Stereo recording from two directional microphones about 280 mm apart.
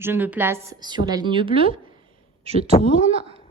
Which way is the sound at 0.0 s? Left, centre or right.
Centre.